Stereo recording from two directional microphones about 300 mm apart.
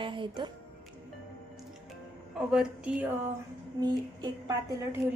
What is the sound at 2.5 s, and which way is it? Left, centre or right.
Speech, centre.